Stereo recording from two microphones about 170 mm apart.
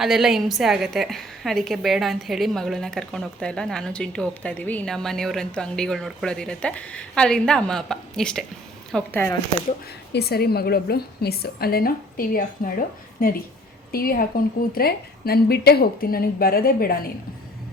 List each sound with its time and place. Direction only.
0.0 s a woman's voice: centre (ahead or behind)
10.1 s a woman's voice: 70° left (ahead or behind)